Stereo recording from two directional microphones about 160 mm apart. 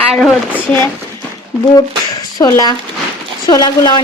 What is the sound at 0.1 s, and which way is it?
Speech, 10° left (ahead or behind).